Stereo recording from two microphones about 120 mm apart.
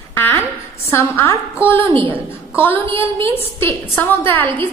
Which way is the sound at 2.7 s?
50° right (ahead or behind).